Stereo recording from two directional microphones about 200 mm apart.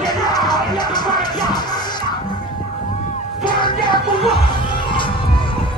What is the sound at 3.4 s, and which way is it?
Child singing, 25° left (ahead or behind).